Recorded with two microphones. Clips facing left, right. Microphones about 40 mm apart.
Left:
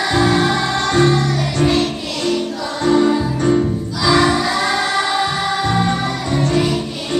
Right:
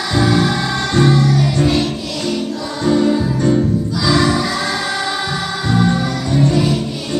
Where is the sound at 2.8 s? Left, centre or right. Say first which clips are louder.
Left 1 dB; left.